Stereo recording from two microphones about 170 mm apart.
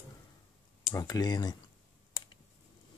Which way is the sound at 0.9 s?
20° left (ahead or behind).